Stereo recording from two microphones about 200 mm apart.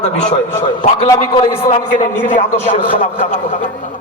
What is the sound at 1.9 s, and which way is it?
A man's voice, 40° left (ahead or behind).